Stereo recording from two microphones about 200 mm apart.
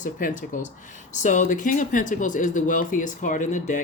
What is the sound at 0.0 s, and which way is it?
Speech, 40° left (ahead or behind).